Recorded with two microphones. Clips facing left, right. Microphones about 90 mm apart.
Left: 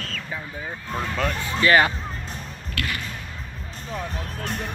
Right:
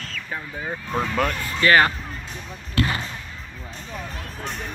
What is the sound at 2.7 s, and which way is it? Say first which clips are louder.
Basketball bounce: right 6 dB; 30° right (ahead or behind).